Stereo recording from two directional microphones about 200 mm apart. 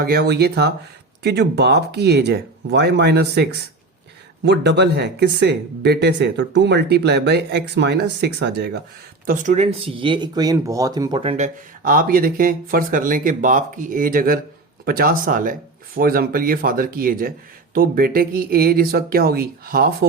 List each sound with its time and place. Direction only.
0.0 s speech: 50° right (ahead or behind)
9.2 s speech: 40° right (ahead or behind)